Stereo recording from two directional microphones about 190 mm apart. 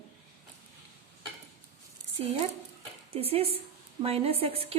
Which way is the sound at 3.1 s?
30° right (ahead or behind).